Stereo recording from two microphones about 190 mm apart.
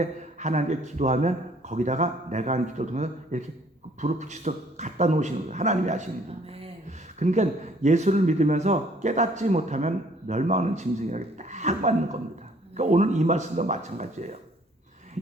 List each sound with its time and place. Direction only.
0.0 s speech: 40° right (ahead or behind)
7.2 s speech: 40° right (ahead or behind)